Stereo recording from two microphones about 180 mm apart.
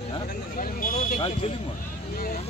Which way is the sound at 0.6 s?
50° left (ahead or behind).